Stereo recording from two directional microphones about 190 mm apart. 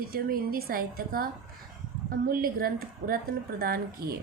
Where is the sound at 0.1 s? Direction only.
50° right (ahead or behind).